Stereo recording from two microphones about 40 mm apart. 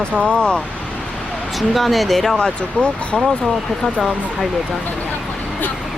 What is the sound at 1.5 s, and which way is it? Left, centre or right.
Speech, centre.